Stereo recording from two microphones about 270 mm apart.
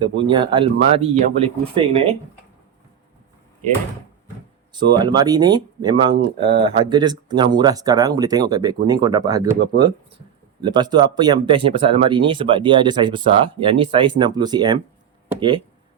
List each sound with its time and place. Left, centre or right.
0.3 s speech: centre
4.7 s speech: centre
10.6 s speech: centre